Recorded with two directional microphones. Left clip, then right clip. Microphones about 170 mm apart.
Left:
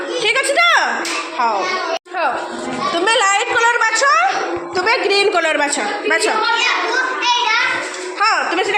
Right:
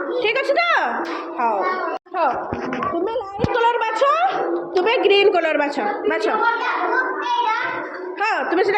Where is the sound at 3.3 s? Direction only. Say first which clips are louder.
Left 4 dB; 20° right (ahead or behind).